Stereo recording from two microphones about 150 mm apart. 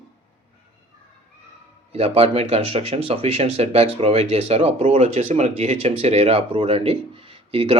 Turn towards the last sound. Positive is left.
turn(degrees=-35)  # may be behind; listen again after turning